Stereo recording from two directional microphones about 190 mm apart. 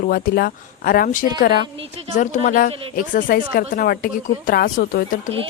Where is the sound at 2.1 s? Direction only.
40° left (ahead or behind).